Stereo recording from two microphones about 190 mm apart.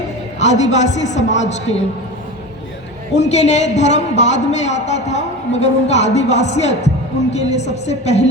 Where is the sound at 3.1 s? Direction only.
35° left (ahead or behind).